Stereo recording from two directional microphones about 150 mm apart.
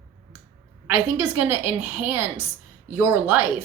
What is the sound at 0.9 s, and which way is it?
A woman's voice, 10° right (ahead or behind).